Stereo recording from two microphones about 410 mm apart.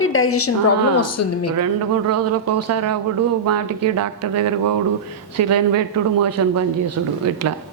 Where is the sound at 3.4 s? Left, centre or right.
Right.